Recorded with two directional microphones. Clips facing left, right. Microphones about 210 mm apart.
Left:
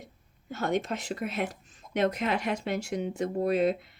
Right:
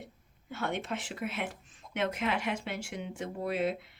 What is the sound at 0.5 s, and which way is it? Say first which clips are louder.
Speech: left 5 dB; 40° left (ahead or behind).